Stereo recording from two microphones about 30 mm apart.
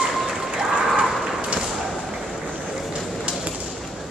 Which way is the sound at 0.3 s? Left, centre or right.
Centre.